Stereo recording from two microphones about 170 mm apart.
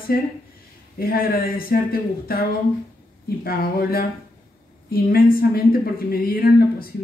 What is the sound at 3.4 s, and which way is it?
Speech, 60° left (ahead or behind).